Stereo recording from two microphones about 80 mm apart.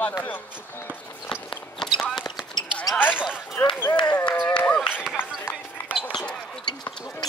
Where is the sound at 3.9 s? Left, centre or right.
Centre.